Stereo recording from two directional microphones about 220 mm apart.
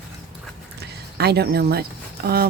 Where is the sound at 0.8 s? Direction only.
45° right (ahead or behind).